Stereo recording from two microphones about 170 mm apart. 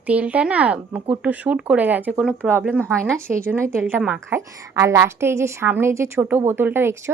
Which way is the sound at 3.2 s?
15° right (ahead or behind).